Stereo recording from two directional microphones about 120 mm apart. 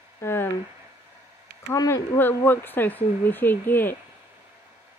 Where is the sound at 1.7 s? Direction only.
25° left (ahead or behind).